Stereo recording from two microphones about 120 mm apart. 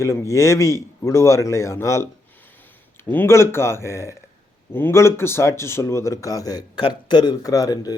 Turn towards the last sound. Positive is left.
turn(degrees=30)  # may be behind; listen again after turning